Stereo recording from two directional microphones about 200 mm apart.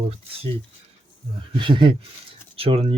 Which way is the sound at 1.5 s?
25° right (ahead or behind).